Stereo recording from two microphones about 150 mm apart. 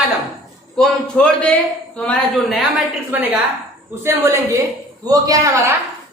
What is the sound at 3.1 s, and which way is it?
A woman's voice, 10° right (ahead or behind).